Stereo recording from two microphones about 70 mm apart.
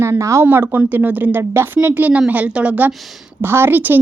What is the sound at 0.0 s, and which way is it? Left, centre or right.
Speech, right.